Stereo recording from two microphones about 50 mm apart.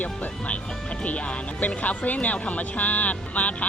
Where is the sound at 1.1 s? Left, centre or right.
Left.